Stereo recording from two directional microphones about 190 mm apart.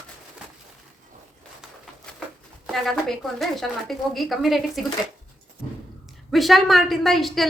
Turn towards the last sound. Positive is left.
turn(degrees=0)  # may be behind; listen again after turning